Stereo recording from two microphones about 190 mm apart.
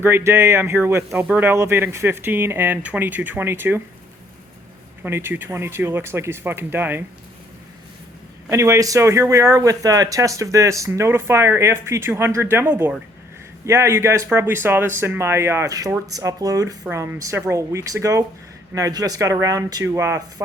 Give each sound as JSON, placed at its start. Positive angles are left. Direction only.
{"t": 0.0, "sound": "speech", "side_deg": -15}
{"t": 5.0, "sound": "speech", "side_deg": -10}
{"t": 8.4, "sound": "speech", "side_deg": -15}